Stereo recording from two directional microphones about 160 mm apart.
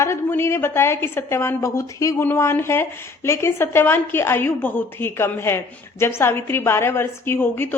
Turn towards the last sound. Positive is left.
turn(degrees=15)  # may be behind; listen again after turning